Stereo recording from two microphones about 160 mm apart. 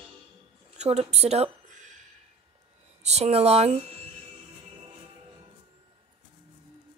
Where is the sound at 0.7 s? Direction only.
40° right (ahead or behind).